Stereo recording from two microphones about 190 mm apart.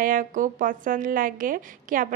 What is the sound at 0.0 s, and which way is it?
A woman's voice, 45° right (ahead or behind).